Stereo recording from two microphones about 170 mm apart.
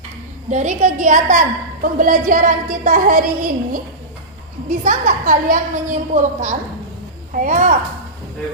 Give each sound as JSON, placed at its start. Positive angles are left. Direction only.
{"t": 0.5, "sound": "a woman's voice", "side_deg": -45}
{"t": 4.8, "sound": "a woman's voice", "side_deg": -50}